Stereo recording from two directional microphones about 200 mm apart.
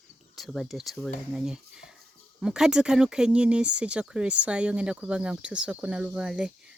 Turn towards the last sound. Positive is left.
turn(degrees=-5)  # may be behind; listen again after turning